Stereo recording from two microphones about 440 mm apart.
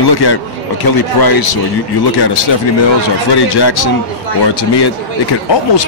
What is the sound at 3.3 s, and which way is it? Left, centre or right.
A man's voice, left.